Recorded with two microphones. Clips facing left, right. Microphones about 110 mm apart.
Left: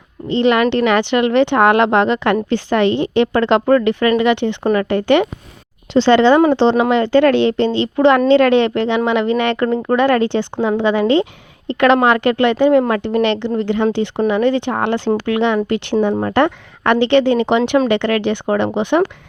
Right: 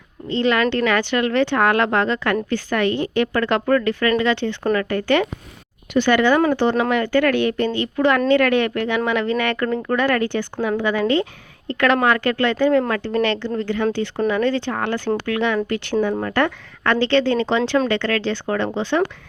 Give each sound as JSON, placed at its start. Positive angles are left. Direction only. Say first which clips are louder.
{"t": 0.3, "sound": "speech", "louder": "left 5 dB", "side_deg": 20}